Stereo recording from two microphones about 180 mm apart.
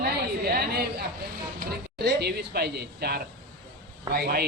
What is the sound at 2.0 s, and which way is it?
Speech, 60° right (ahead or behind).